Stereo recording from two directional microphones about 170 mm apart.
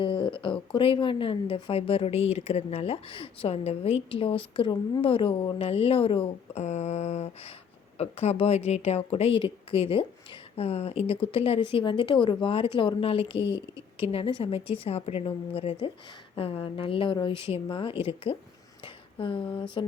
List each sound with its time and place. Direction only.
0.0 s speech: 30° left (ahead or behind)